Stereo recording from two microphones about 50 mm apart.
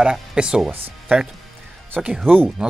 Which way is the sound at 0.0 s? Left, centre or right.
Centre.